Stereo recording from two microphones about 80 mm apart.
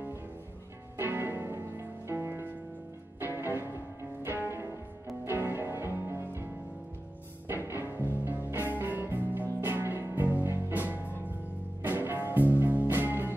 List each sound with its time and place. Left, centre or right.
0.9 s music: right
7.4 s music: right